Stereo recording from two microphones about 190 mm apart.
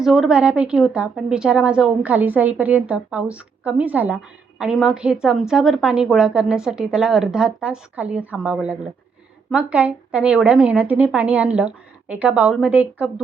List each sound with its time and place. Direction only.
0.0 s a woman's voice: centre (ahead or behind)